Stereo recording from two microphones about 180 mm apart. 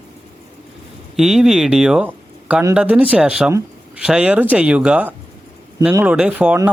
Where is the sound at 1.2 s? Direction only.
Centre (ahead or behind).